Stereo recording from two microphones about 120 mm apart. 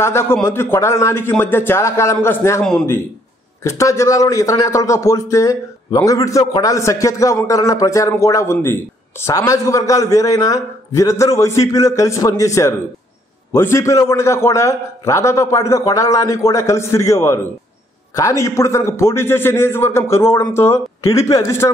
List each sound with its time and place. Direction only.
0.0 s a man's voice: 20° left (ahead or behind)
3.6 s a man's voice: 25° left (ahead or behind)